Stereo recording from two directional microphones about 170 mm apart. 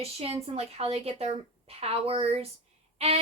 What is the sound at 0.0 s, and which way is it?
A woman's voice, 35° right (ahead or behind).